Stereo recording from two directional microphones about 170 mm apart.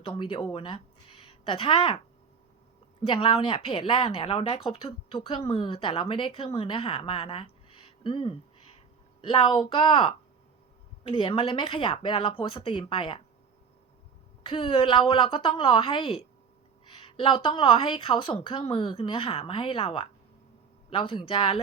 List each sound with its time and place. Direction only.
0.0 s a woman's voice: 30° left (ahead or behind)
3.1 s a woman's voice: 30° left (ahead or behind)
14.4 s a woman's voice: 30° left (ahead or behind)